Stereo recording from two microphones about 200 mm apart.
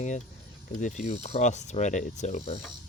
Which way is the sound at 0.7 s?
40° left (ahead or behind).